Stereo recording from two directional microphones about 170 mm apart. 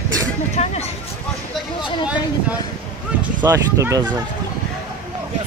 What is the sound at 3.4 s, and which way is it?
Speech, 15° right (ahead or behind).